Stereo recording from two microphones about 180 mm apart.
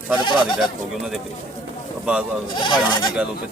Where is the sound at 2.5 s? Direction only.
25° left (ahead or behind).